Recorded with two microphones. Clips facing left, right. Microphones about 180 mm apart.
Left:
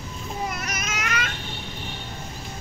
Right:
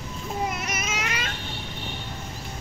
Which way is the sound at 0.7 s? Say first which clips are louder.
Even; 25° right (ahead or behind).